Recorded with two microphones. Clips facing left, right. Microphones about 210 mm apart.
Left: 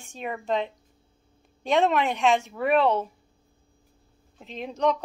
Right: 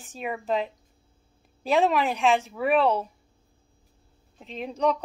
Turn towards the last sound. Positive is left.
turn(degrees=0)  # may be behind; listen again after turning